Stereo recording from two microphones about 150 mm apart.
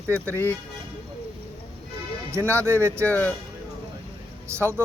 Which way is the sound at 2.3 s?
15° right (ahead or behind).